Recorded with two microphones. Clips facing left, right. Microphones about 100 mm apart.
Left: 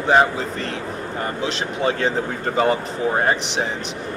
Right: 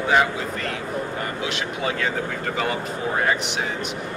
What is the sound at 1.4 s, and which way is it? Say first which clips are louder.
Speech: left 6 dB; 30° left (ahead or behind).